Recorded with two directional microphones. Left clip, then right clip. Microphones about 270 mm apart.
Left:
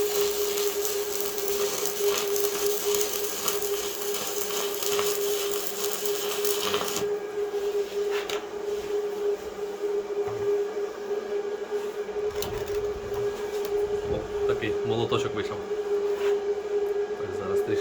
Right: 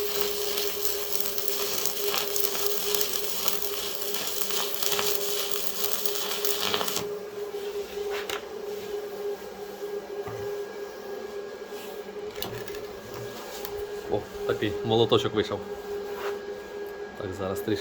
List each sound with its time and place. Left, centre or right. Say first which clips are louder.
14.6 s bee: right 2 dB; right